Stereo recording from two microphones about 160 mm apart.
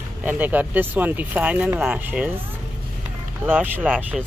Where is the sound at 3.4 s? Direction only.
10° right (ahead or behind).